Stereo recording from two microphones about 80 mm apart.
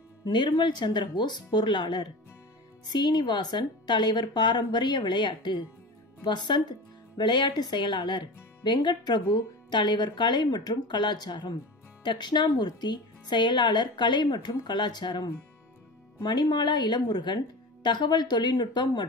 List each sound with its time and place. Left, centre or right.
0.2 s speech: left
16.3 s speech: left